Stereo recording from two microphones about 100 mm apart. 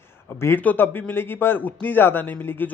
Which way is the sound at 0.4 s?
20° left (ahead or behind).